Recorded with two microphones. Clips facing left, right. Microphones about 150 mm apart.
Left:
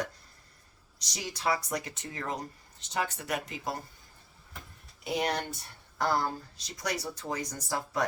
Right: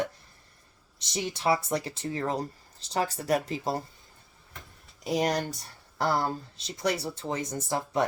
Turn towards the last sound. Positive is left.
turn(degrees=-25)  # may be behind; listen again after turning